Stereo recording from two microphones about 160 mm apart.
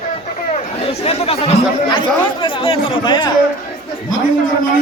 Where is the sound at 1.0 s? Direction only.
40° left (ahead or behind).